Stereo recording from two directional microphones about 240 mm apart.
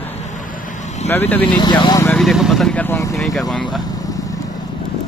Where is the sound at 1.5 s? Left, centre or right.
Centre.